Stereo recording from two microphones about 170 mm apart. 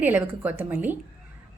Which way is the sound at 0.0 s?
10° right (ahead or behind).